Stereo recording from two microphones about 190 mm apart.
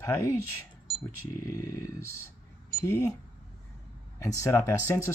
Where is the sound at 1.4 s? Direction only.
15° left (ahead or behind).